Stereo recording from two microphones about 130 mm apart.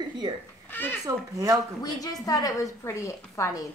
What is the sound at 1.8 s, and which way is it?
A woman's voice, 30° left (ahead or behind).